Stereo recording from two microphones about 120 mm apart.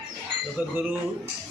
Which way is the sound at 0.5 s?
15° right (ahead or behind).